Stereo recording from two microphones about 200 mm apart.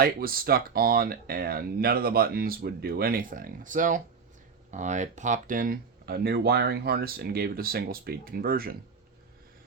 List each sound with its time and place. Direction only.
0.0 s speech: 45° right (ahead or behind)